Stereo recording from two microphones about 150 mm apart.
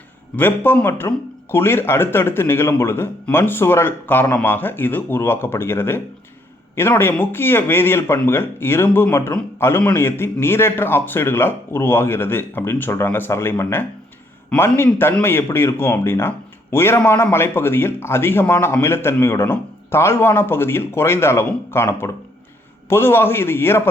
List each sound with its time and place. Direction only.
0.3 s speech: 15° left (ahead or behind)